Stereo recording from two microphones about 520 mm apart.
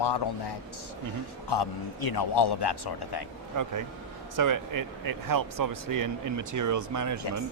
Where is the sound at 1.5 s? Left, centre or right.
Left.